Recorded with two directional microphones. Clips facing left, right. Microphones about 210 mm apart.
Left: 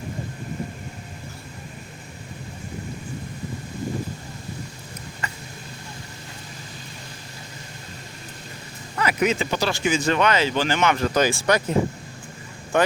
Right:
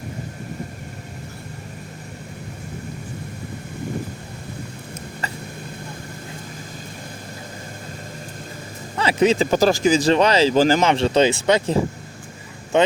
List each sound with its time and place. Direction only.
9.0 s speech: 30° right (ahead or behind)
9.5 s speech: 45° right (ahead or behind); by 12.9 s 20° right (ahead or behind)